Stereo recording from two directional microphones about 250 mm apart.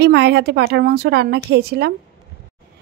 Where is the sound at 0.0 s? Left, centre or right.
Right.